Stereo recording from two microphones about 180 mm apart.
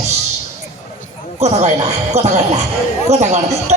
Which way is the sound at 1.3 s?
35° right (ahead or behind).